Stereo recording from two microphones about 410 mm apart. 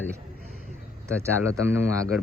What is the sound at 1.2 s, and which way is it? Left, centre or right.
Speech, centre.